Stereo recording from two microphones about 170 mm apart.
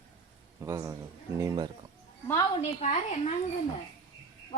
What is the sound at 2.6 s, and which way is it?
Speech, 40° left (ahead or behind).